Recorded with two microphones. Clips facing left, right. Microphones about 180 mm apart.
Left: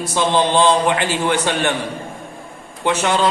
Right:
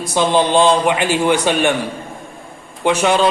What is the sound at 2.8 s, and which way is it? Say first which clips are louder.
Speech: right 3 dB; 15° right (ahead or behind).